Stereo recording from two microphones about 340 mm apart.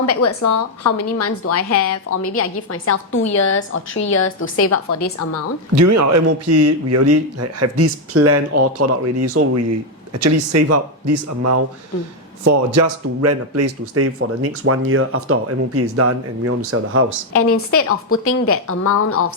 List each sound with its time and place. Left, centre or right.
0.0 s a woman's voice: left
4.6 s a woman's voice: left
5.7 s a man's voice: right
17.3 s a woman's voice: left